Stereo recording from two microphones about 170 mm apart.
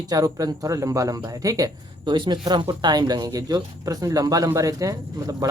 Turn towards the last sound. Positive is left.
turn(degrees=-20)  # may be behind; listen again after turning